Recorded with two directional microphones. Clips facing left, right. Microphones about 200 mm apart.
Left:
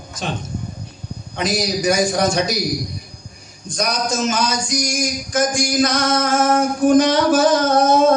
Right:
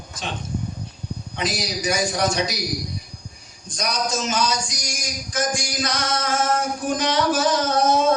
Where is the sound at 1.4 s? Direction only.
45° left (ahead or behind).